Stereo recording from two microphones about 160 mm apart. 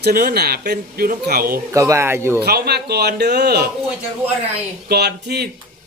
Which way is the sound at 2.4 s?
90° right.